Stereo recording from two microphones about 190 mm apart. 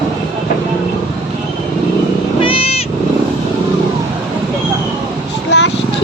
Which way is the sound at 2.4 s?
30° left (ahead or behind).